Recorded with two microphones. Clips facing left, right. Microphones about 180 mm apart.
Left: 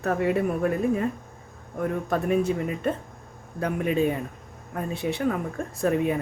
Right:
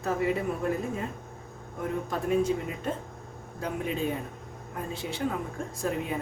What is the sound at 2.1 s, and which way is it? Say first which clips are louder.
Speech: left 2 dB; 65° left (ahead or behind).